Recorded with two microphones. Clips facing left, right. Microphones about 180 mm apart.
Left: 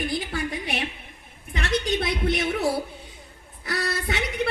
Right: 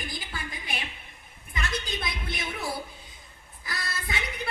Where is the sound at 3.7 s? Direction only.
70° left (ahead or behind).